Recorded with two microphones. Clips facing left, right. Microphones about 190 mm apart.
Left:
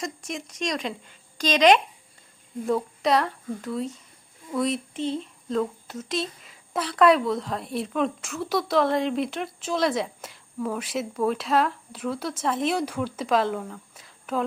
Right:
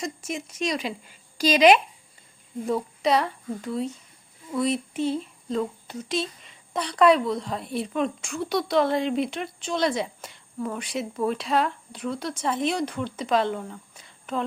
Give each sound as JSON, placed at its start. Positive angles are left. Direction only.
{"t": 0.0, "sound": "speech", "side_deg": 0}